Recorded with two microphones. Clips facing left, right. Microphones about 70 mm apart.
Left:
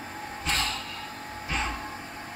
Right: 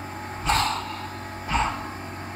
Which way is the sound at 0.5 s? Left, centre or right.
Right.